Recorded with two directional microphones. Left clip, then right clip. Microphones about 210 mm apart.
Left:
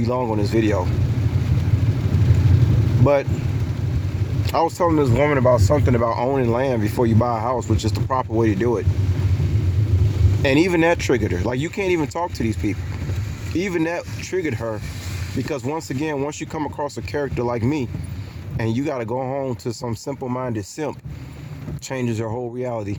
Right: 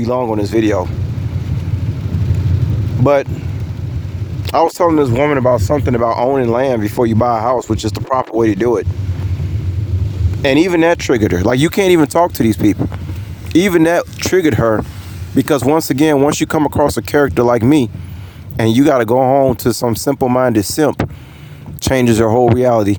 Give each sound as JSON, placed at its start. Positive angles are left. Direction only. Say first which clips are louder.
{"t": 0.0, "sound": "speech", "louder": "right 6 dB", "side_deg": -40}
{"t": 3.0, "sound": "speech", "louder": "right 6 dB", "side_deg": -40}
{"t": 4.4, "sound": "speech", "louder": "right 7 dB", "side_deg": -40}
{"t": 10.4, "sound": "speech", "louder": "right 6 dB", "side_deg": -40}